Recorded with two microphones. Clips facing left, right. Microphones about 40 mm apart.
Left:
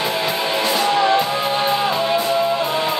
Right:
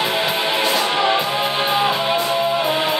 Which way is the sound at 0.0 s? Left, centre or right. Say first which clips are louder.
Right 1 dB; right.